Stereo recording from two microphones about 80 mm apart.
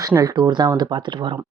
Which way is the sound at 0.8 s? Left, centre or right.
Right.